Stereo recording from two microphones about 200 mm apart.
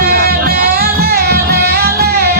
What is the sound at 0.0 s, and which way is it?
Music, 50° right (ahead or behind).